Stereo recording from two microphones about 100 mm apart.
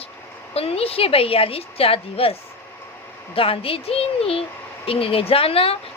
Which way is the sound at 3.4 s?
70° left (ahead or behind).